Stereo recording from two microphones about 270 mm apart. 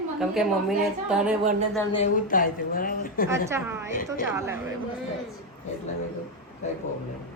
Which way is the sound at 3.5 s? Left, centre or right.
Centre.